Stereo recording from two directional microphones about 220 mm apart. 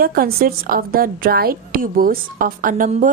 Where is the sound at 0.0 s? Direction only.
40° right (ahead or behind).